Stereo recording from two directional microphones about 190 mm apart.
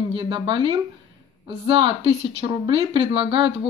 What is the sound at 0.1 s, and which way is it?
Speech, 25° right (ahead or behind).